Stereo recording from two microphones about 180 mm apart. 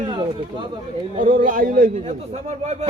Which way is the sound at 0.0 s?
25° right (ahead or behind).